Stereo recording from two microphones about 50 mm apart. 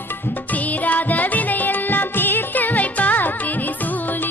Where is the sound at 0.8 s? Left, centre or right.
Left.